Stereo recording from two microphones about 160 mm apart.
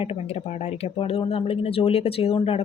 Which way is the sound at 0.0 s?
40° left (ahead or behind).